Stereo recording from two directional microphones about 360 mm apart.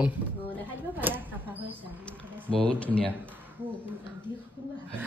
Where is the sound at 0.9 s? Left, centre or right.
Centre.